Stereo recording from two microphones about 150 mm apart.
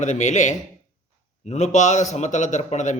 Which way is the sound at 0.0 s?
50° left (ahead or behind).